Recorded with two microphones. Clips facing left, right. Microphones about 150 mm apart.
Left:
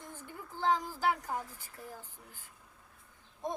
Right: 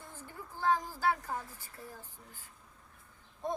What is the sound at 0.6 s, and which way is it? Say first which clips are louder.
Female singing: even; 15° left (ahead or behind).